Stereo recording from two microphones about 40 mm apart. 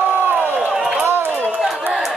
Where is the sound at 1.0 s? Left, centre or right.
Right.